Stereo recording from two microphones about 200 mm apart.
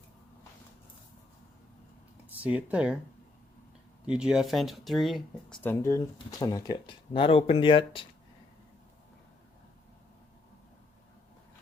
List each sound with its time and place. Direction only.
2.4 s speech: 5° right (ahead or behind)
4.0 s speech: 5° right (ahead or behind)
6.4 s speech: 20° left (ahead or behind)